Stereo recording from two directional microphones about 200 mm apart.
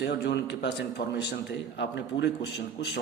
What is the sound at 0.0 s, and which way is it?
A man's voice, 60° left (ahead or behind).